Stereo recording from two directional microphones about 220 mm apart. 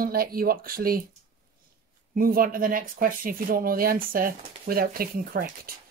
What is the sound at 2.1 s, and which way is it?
Speech, 40° right (ahead or behind).